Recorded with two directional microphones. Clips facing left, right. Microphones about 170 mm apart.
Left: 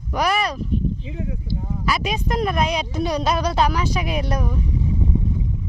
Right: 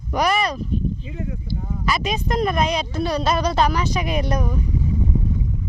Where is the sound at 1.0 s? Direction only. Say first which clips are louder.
Even; 20° left (ahead or behind).